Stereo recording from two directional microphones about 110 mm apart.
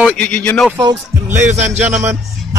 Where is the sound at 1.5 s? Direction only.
90° right.